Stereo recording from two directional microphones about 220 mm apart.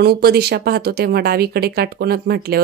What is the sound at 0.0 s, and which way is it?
Speech, 45° right (ahead or behind).